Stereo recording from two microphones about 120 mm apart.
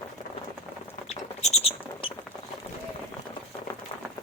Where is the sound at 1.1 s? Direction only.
65° left (ahead or behind).